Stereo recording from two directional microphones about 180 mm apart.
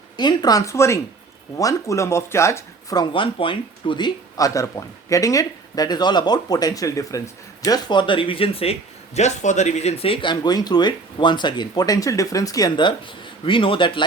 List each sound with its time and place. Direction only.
0.2 s speech: 20° left (ahead or behind)